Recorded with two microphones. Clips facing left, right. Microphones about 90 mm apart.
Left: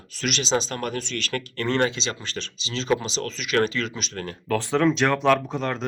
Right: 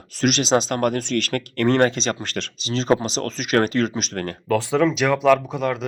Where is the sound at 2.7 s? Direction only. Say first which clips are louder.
Right 5 dB; 40° right (ahead or behind).